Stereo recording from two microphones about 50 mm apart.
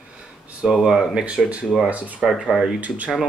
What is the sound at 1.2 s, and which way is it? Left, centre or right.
Speech, right.